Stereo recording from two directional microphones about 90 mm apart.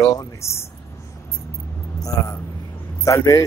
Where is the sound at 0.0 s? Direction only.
35° left (ahead or behind).